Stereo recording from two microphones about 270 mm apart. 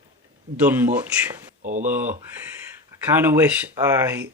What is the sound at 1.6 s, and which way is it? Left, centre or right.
Speech, right.